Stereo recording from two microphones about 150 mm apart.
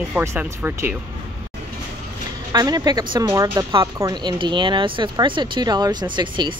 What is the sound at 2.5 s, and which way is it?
Speech, 25° right (ahead or behind).